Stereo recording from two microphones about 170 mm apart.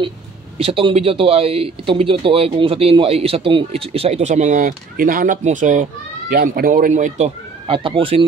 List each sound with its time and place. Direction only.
0.6 s speech: 35° right (ahead or behind)